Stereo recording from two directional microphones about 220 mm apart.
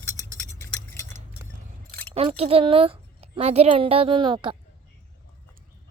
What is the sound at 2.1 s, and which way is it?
A woman's voice, 25° right (ahead or behind).